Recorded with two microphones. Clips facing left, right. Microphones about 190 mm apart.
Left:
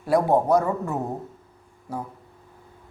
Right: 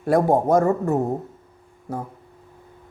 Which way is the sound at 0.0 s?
50° right (ahead or behind).